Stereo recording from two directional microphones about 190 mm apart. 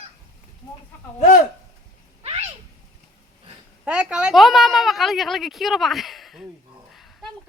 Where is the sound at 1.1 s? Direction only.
40° left (ahead or behind).